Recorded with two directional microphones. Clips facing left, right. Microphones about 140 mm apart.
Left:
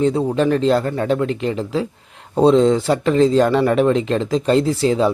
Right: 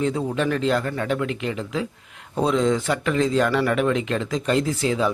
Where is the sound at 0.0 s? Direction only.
35° left (ahead or behind).